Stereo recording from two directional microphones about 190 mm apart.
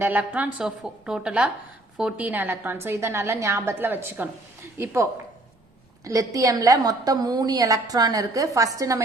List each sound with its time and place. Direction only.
0.0 s a woman's voice: 10° right (ahead or behind)
6.1 s a woman's voice: 20° right (ahead or behind)